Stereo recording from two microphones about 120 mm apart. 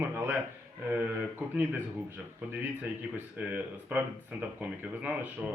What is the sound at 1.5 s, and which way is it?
Speech, 15° right (ahead or behind).